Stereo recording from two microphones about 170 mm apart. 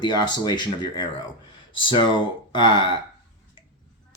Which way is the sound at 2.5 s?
25° left (ahead or behind).